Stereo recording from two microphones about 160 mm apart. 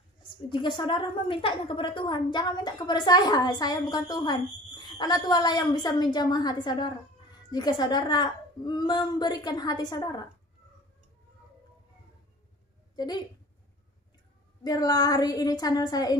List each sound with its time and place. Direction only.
0.3 s a woman's voice: 30° left (ahead or behind)
12.9 s a woman's voice: 25° left (ahead or behind)
14.6 s a woman's voice: 25° left (ahead or behind)